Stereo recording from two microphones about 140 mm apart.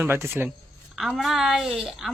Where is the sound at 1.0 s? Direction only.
Centre (ahead or behind).